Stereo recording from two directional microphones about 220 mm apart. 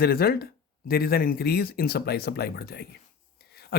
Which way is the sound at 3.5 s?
45° left (ahead or behind).